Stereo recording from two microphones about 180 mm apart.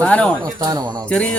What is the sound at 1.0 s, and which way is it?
Speech, 5° left (ahead or behind).